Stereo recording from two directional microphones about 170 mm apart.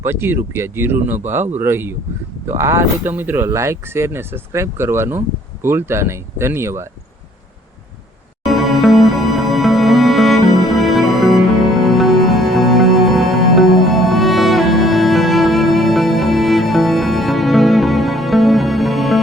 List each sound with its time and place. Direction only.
0.0 s speech: 15° right (ahead or behind)
8.4 s music: centre (ahead or behind)